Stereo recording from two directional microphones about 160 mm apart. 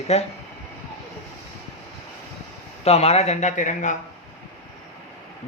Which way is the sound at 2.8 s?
40° left (ahead or behind).